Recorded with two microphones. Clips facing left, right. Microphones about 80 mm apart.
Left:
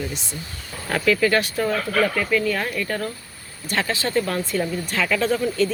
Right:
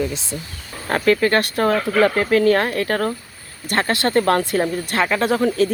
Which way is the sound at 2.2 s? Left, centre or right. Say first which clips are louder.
Right 7 dB; right.